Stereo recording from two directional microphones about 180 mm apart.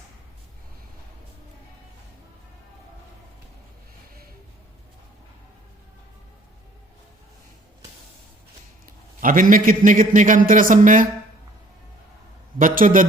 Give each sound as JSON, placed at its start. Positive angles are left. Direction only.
{"t": 8.9, "sound": "a man's voice", "side_deg": -50}
{"t": 12.5, "sound": "a man's voice", "side_deg": -50}